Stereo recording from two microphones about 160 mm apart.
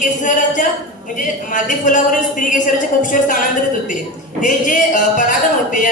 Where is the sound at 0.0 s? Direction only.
50° left (ahead or behind).